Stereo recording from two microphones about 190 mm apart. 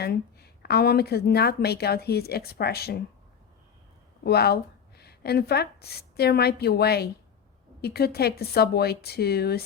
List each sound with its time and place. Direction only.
0.0 s a woman's voice: 55° left (ahead or behind)
4.2 s a woman's voice: 55° left (ahead or behind)